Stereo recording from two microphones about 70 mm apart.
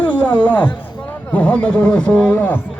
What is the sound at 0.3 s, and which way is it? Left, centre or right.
A man's voice, left.